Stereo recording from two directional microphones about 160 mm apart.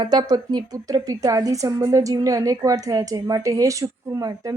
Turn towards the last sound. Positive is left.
turn(degrees=-20)  # may be behind; listen again after turning